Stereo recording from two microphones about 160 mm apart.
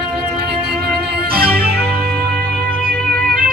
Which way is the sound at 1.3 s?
75° right (ahead or behind).